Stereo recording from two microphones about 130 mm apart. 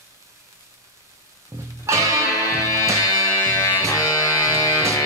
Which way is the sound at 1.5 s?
20° right (ahead or behind).